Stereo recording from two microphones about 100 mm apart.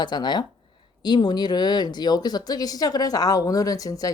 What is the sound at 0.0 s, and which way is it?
Speech, 45° left (ahead or behind).